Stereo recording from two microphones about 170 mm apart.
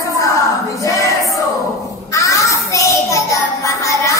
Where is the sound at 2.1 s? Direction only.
20° left (ahead or behind).